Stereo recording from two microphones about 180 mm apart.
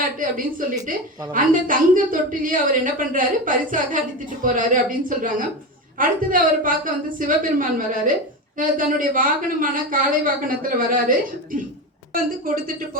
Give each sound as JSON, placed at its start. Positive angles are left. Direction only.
{"t": 0.0, "sound": "a woman's voice", "side_deg": -50}